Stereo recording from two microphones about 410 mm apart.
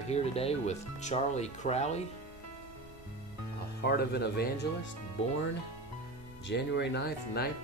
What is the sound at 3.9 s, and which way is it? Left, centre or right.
Speech, left.